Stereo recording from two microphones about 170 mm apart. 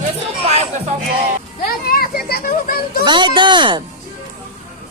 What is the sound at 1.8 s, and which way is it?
Children playing, 60° left (ahead or behind).